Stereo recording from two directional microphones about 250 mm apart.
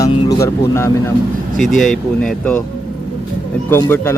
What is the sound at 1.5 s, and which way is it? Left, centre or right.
Speech, centre.